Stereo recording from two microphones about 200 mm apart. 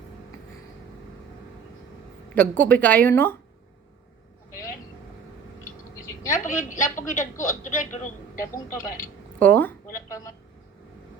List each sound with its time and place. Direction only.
2.3 s a woman's voice: 10° left (ahead or behind)
6.2 s a woman's voice: 40° left (ahead or behind)
9.4 s a woman's voice: 10° left (ahead or behind)